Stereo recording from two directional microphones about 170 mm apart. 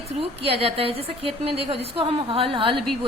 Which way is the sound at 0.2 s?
35° right (ahead or behind).